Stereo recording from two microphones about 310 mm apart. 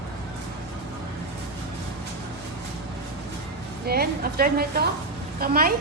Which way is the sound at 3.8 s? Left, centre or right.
Right.